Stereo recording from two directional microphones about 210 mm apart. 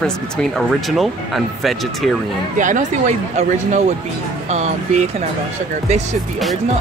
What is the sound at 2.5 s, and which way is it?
Speech, 35° right (ahead or behind).